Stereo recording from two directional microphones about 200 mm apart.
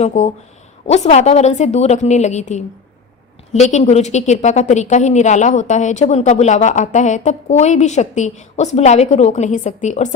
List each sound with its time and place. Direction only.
0.0 s a woman's voice: 35° left (ahead or behind)